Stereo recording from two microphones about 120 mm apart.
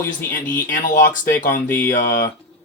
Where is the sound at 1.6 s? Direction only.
15° left (ahead or behind).